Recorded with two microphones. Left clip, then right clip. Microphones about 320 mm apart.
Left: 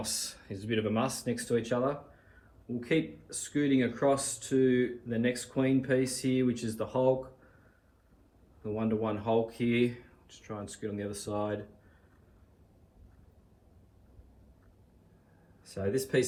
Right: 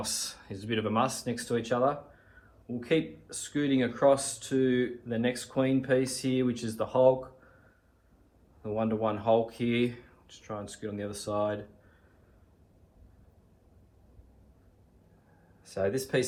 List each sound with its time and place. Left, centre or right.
0.0 s speech: centre
2.8 s speech: centre
8.6 s speech: centre
15.6 s speech: centre